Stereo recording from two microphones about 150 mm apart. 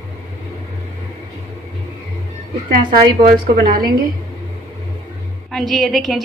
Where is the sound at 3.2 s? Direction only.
85° right.